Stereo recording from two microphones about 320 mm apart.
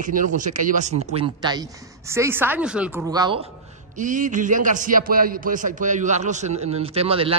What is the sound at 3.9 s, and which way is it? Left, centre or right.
A man's voice, right.